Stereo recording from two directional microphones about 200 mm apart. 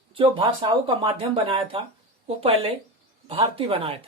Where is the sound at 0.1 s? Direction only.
25° right (ahead or behind).